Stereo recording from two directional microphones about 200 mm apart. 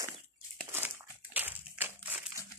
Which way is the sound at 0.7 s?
10° right (ahead or behind).